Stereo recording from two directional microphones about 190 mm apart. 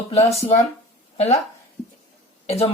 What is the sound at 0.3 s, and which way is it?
Speech, 35° left (ahead or behind).